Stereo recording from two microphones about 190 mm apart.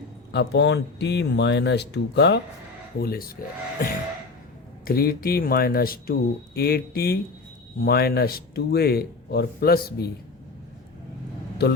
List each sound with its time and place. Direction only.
0.3 s speech: 60° left (ahead or behind)
3.0 s speech: 50° left (ahead or behind)